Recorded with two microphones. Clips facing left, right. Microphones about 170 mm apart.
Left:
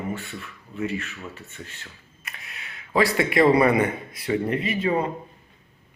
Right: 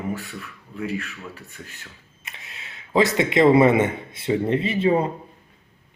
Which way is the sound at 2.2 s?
25° right (ahead or behind).